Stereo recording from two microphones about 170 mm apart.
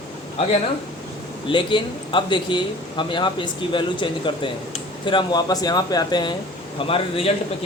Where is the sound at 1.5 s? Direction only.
30° left (ahead or behind).